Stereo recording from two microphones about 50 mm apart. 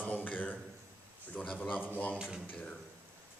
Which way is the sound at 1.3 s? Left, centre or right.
Left.